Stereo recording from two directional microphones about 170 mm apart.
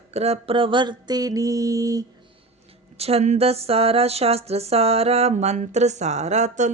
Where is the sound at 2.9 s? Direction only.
35° right (ahead or behind).